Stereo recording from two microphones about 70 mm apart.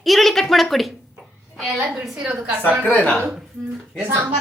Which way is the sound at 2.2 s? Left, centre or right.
Centre.